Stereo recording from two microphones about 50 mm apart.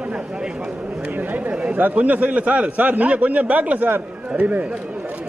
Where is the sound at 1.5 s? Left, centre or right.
Right.